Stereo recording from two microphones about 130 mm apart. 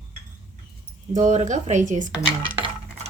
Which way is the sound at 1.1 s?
70° right (ahead or behind).